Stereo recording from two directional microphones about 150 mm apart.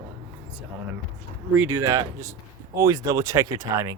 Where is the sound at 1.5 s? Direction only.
15° right (ahead or behind).